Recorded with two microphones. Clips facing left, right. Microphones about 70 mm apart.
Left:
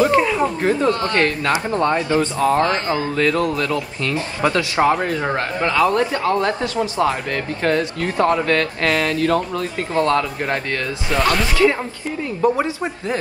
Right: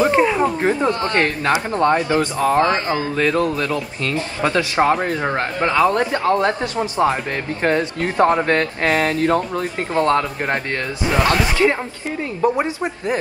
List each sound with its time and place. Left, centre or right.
0.0 s speech: centre
5.0 s a man's voice: centre
5.6 s a man's voice: right
12.5 s speech: right